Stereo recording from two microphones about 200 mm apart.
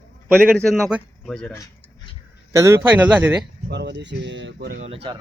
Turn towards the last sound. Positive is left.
turn(degrees=-35)  # may be behind; listen again after turning